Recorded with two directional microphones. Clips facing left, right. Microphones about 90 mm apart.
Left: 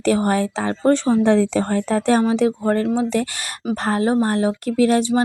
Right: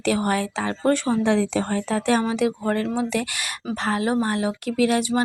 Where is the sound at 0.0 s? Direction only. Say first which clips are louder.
Left 4 dB; 35° left (ahead or behind).